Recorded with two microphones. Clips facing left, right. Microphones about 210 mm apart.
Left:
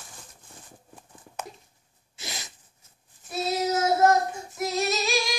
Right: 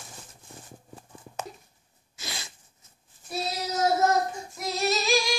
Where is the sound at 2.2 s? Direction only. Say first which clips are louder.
Even; 20° left (ahead or behind).